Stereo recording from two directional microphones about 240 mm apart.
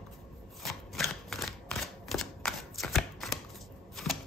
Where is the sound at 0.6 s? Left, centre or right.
Centre.